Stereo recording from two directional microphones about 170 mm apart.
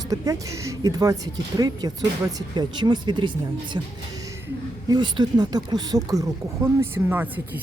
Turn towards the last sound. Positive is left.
turn(degrees=-10)  # may be behind; listen again after turning